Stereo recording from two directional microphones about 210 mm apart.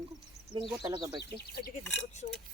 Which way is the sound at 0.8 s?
20° right (ahead or behind).